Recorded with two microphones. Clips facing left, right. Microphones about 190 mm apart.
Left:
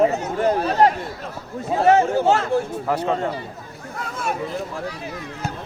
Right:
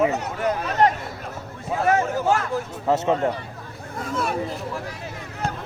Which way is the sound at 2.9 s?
20° right (ahead or behind).